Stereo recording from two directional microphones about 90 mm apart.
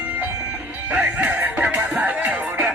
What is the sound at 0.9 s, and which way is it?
Music, 10° right (ahead or behind).